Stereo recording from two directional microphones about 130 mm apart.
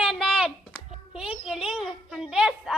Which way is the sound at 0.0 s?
Centre (ahead or behind).